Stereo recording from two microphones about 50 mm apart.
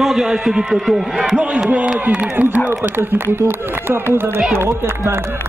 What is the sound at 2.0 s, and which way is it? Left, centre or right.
A man's voice, right.